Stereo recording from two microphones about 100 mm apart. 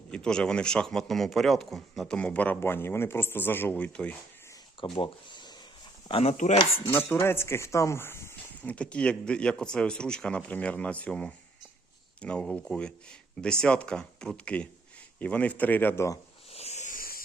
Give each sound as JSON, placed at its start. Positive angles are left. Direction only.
{"t": 0.1, "sound": "speech", "side_deg": 5}
{"t": 4.8, "sound": "speech", "side_deg": 55}
{"t": 6.1, "sound": "speech", "side_deg": 70}
{"t": 7.1, "sound": "speech", "side_deg": 25}
{"t": 8.6, "sound": "speech", "side_deg": 15}
{"t": 16.5, "sound": "a sound", "side_deg": 90}